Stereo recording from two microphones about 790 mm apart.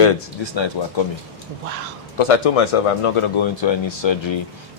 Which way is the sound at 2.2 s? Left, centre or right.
Left.